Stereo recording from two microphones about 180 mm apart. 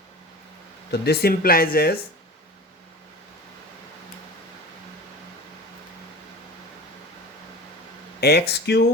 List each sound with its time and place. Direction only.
0.9 s speech: 65° left (ahead or behind)
8.2 s speech: 65° left (ahead or behind)